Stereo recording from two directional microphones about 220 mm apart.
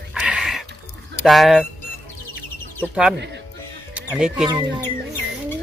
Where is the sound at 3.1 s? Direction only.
50° right (ahead or behind).